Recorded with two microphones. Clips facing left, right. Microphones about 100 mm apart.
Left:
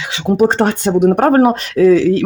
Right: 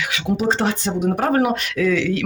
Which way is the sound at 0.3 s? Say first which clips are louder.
Left 8 dB; 55° left (ahead or behind).